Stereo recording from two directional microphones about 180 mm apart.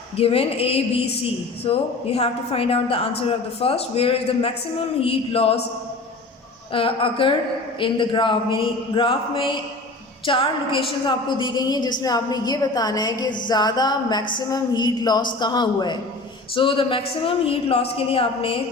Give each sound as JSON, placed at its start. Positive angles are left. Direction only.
{"t": 0.2, "sound": "a woman's voice", "side_deg": 35}
{"t": 6.7, "sound": "a woman's voice", "side_deg": 30}